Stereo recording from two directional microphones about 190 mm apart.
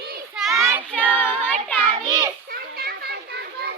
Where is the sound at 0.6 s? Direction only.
15° right (ahead or behind).